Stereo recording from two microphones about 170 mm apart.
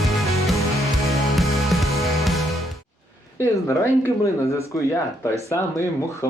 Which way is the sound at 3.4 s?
15° left (ahead or behind).